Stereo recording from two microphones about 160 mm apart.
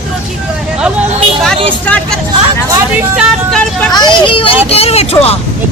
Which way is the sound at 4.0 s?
30° left (ahead or behind).